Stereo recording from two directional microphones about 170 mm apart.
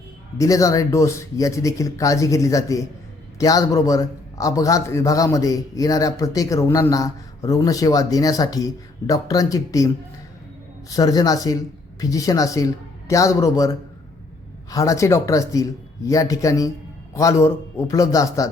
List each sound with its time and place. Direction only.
0.3 s speech: 20° left (ahead or behind)
14.7 s speech: 20° left (ahead or behind)